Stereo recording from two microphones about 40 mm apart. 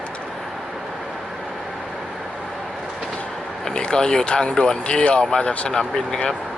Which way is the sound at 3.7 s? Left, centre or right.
Left.